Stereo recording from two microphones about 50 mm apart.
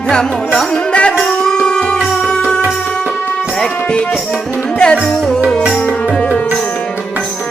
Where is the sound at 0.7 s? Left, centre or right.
Centre.